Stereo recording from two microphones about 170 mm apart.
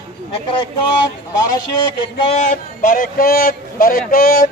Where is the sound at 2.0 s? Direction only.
30° left (ahead or behind).